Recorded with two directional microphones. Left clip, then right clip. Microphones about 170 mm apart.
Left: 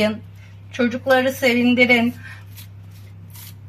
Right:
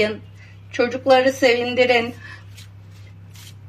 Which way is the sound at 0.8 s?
25° right (ahead or behind).